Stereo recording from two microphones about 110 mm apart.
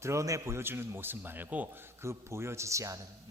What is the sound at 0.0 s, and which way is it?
A man's voice, 25° right (ahead or behind).